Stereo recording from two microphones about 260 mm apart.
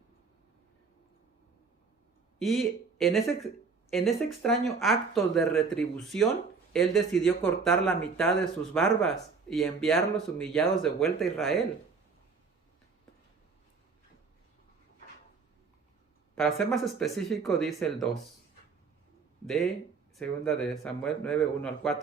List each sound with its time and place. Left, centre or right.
2.4 s speech: centre
16.3 s speech: centre
20.1 s speech: centre